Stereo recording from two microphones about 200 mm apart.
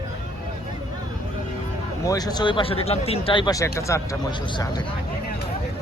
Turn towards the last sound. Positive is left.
turn(degrees=20)  # may be behind; listen again after turning